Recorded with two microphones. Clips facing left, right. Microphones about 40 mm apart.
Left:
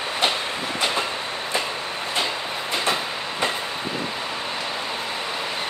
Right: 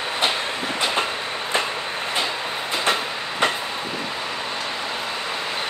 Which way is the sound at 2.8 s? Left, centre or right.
Right.